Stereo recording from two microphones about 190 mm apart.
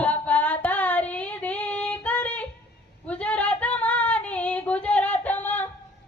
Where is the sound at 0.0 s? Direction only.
10° left (ahead or behind).